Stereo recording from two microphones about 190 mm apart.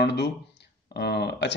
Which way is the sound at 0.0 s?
60° left (ahead or behind).